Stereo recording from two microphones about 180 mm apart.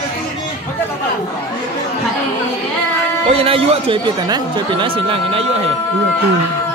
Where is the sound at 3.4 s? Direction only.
30° right (ahead or behind).